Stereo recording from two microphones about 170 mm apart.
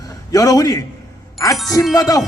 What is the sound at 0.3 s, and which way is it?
A man's voice, 20° left (ahead or behind).